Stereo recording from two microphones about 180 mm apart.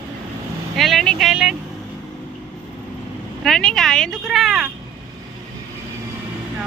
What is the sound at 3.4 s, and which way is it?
Speech, 5° left (ahead or behind).